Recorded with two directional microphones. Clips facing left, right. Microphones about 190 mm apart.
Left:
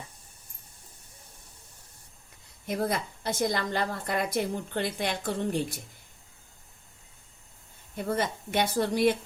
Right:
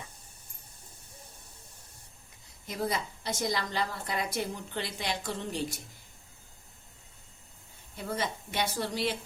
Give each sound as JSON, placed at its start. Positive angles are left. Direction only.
{"t": 2.6, "sound": "a woman's voice", "side_deg": 55}
{"t": 7.9, "sound": "a woman's voice", "side_deg": 55}